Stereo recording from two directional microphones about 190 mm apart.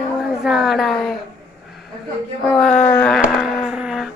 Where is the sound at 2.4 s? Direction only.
Centre (ahead or behind).